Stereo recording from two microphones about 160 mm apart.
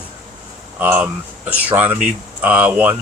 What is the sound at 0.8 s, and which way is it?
Speech, 10° right (ahead or behind).